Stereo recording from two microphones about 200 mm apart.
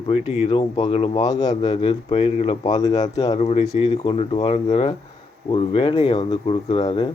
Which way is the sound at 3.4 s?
30° left (ahead or behind).